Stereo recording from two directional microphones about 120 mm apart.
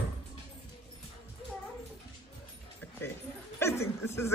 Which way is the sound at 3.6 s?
20° left (ahead or behind).